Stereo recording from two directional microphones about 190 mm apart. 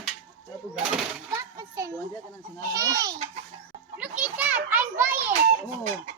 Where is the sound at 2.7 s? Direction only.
15° right (ahead or behind).